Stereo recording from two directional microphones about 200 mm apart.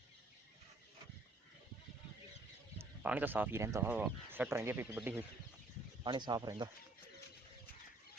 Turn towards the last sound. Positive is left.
turn(degrees=-20)  # may be behind; listen again after turning